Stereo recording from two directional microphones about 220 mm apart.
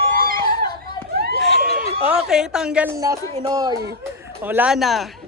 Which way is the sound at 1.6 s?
45° right (ahead or behind).